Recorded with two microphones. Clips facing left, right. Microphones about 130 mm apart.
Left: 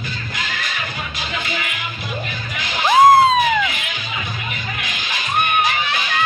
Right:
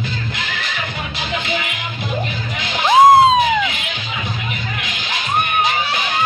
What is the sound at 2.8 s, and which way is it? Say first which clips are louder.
Cat: right 2 dB; 20° right (ahead or behind).